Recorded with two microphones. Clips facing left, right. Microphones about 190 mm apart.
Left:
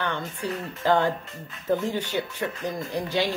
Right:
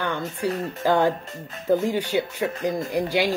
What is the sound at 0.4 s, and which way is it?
Speech, 40° right (ahead or behind).